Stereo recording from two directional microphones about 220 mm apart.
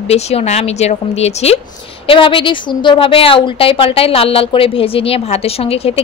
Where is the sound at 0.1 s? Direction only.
30° left (ahead or behind).